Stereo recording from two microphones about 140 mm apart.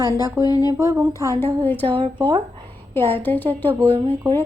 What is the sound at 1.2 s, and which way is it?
Speech, 15° left (ahead or behind).